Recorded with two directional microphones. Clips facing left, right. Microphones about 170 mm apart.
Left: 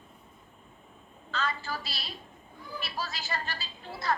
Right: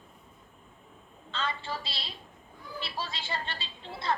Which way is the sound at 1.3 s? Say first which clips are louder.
Left 1 dB; 25° right (ahead or behind).